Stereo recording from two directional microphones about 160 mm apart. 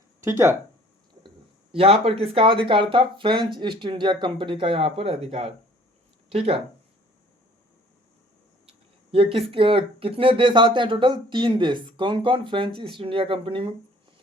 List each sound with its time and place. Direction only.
0.2 s speech: 15° right (ahead or behind)
1.7 s speech: 35° right (ahead or behind)
9.1 s speech: 35° right (ahead or behind)